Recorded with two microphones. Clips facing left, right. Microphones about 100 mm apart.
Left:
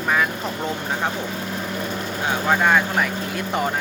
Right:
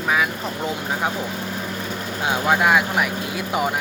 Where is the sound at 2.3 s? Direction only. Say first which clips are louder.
Right 1 dB; 10° right (ahead or behind).